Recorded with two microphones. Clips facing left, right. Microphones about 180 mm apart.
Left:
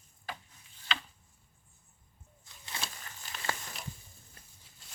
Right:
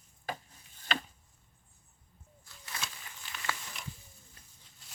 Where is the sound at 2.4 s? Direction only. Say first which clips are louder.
Left 1 dB; 25° left (ahead or behind).